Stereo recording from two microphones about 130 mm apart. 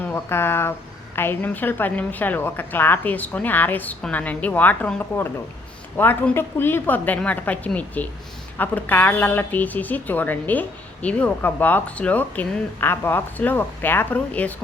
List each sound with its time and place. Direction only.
0.1 s speech: 20° left (ahead or behind)